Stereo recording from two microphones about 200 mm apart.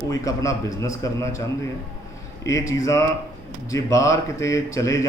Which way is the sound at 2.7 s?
15° left (ahead or behind).